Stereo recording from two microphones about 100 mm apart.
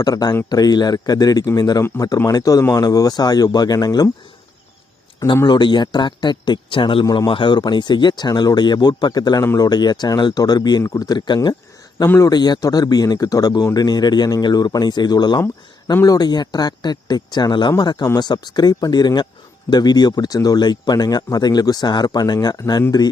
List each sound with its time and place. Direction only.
0.0 s speech: 40° left (ahead or behind)
5.5 s speech: 50° left (ahead or behind)
7.0 s speech: 40° left (ahead or behind)
7.3 s speech: 55° left (ahead or behind)